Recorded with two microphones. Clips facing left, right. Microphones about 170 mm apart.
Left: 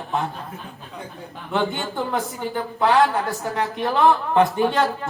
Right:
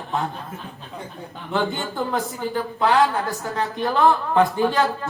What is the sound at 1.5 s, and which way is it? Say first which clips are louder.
A woman's voice: even; 20° left (ahead or behind).